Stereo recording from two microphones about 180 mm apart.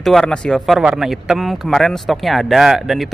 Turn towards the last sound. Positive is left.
turn(degrees=0)  # may be behind; listen again after turning